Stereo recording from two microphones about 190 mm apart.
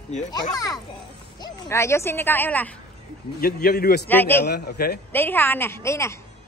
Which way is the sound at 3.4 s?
50° left (ahead or behind).